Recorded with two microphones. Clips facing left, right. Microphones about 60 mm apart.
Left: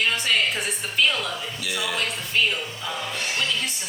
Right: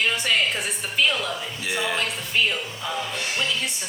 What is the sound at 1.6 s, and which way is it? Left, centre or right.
Speech, right.